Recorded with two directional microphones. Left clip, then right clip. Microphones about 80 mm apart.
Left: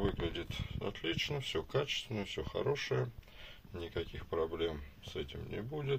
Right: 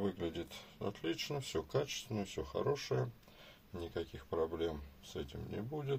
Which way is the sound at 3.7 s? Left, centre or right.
Right.